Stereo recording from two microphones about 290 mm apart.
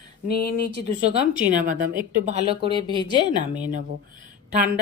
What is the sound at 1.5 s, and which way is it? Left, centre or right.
A woman's voice, right.